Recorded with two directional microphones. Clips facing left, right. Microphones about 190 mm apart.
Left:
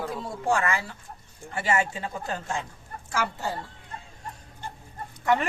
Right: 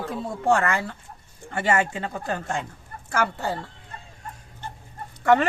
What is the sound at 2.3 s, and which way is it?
Speech, 55° right (ahead or behind).